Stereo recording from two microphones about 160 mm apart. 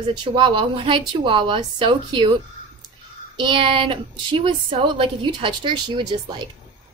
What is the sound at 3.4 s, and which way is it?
A woman's voice, 30° right (ahead or behind).